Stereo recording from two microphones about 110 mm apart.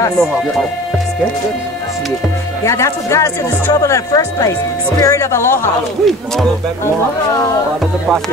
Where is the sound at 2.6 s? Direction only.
25° left (ahead or behind).